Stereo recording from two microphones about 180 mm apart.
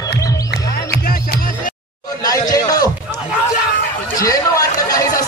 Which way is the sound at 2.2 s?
20° left (ahead or behind).